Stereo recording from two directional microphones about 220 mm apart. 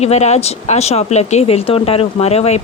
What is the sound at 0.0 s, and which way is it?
Speech, 30° left (ahead or behind).